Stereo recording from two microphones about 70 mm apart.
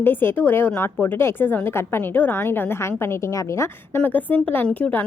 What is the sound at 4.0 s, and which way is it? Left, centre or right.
Speech, left.